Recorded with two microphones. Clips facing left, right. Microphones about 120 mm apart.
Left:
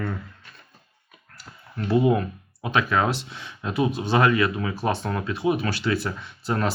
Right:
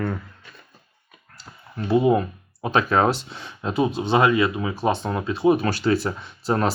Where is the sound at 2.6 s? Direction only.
35° right (ahead or behind).